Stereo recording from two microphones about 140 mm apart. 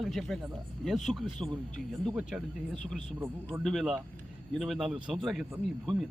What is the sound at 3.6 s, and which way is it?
A man's voice, centre (ahead or behind).